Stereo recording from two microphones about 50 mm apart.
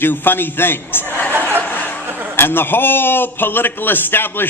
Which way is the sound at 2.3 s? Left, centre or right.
Left.